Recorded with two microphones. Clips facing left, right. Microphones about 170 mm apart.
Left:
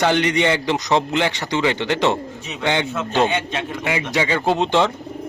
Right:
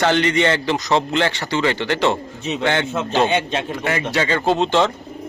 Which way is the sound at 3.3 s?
30° right (ahead or behind).